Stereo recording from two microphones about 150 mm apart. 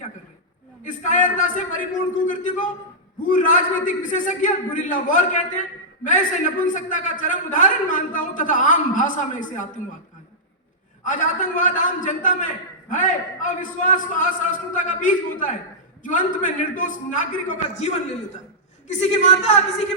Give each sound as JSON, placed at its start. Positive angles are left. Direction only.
{"t": 0.9, "sound": "a man's voice", "side_deg": 60}
{"t": 11.0, "sound": "a man's voice", "side_deg": 60}